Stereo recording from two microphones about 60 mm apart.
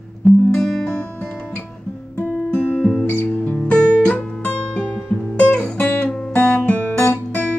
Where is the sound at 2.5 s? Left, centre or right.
Left.